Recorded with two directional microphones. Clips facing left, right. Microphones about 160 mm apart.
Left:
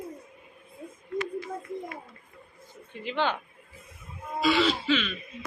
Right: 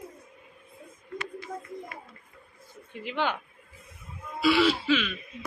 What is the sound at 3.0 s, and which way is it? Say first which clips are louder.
Speech: left 1 dB; 10° right (ahead or behind).